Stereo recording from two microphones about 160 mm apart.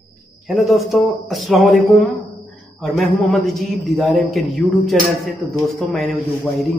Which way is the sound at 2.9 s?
Centre (ahead or behind).